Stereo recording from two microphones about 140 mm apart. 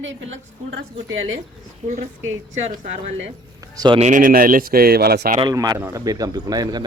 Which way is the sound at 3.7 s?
30° right (ahead or behind).